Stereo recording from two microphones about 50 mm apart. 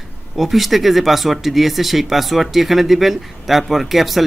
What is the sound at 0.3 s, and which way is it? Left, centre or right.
Speech, centre.